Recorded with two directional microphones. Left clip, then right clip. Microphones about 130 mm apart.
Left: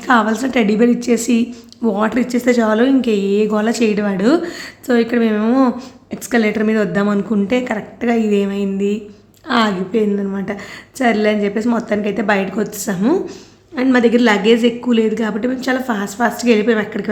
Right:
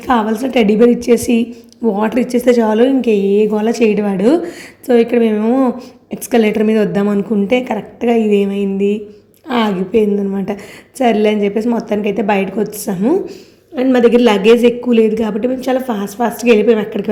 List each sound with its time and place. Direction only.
0.1 s a woman's voice: 5° right (ahead or behind)
1.5 s a woman's voice: centre (ahead or behind)
2.0 s a woman's voice: 15° right (ahead or behind)
5.4 s speech: centre (ahead or behind)
6.1 s a woman's voice: 20° right (ahead or behind)
13.0 s speech: centre (ahead or behind)
13.7 s a woman's voice: 15° right (ahead or behind)